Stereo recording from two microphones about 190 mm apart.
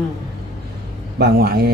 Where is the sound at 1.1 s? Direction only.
55° right (ahead or behind).